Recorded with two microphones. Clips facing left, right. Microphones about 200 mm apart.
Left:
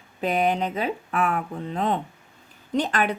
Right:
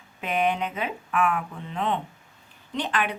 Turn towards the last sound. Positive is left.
turn(degrees=40)  # may be behind; listen again after turning